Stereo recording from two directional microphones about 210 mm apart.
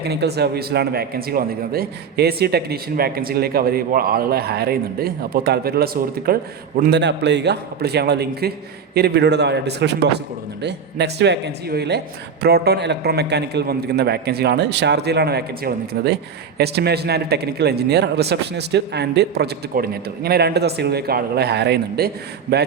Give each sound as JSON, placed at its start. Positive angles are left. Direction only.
{"t": 0.0, "sound": "speech", "side_deg": -50}